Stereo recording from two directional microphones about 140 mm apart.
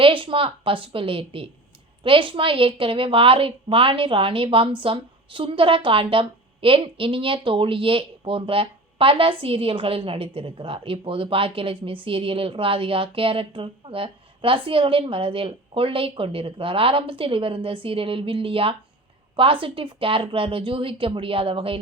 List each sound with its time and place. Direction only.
0.0 s a woman's voice: 40° right (ahead or behind)